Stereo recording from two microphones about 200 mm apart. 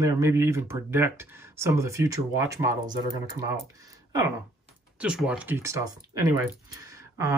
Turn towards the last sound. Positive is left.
turn(degrees=-15)  # may be behind; listen again after turning